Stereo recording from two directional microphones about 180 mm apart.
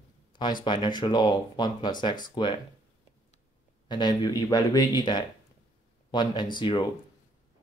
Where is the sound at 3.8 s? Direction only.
25° left (ahead or behind).